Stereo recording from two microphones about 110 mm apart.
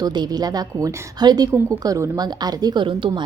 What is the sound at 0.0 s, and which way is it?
A woman's voice, 40° right (ahead or behind).